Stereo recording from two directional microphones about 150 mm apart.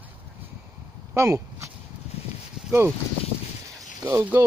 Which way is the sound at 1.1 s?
20° right (ahead or behind).